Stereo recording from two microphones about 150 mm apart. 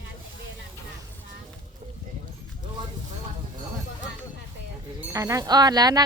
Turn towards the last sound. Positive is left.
turn(degrees=-25)  # may be behind; listen again after turning